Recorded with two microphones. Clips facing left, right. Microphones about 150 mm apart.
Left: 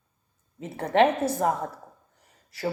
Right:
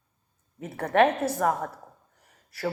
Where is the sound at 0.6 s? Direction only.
20° left (ahead or behind).